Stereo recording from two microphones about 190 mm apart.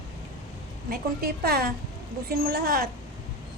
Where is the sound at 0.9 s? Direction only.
50° right (ahead or behind).